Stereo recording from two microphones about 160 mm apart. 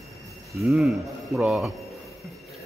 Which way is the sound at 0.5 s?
Centre (ahead or behind).